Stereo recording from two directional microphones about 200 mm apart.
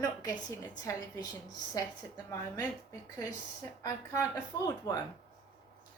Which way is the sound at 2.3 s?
15° left (ahead or behind).